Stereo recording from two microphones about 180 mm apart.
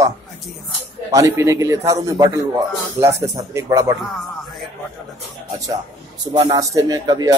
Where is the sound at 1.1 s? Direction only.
20° right (ahead or behind).